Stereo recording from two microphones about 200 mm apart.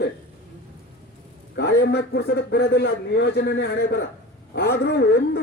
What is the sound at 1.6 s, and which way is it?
A man's voice, 55° left (ahead or behind).